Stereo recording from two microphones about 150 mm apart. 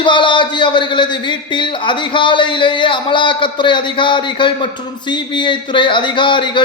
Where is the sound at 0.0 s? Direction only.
30° left (ahead or behind).